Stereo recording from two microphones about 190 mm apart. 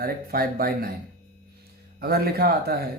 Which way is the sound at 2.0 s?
55° right (ahead or behind).